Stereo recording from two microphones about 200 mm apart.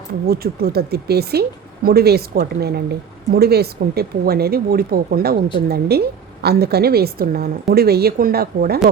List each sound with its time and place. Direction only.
0.3 s speech: 50° right (ahead or behind)